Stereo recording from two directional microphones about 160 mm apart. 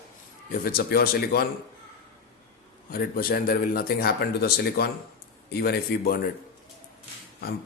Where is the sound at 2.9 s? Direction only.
70° left (ahead or behind).